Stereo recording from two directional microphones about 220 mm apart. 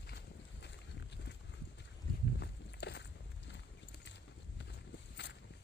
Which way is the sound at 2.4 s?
50° left (ahead or behind).